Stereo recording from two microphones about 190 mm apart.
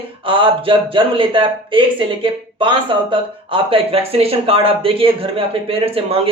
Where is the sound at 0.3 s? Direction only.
25° right (ahead or behind).